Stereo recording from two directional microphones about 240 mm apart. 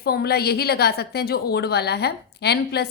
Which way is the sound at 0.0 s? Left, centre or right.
Left.